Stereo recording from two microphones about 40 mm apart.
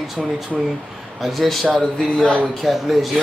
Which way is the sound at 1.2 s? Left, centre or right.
Centre.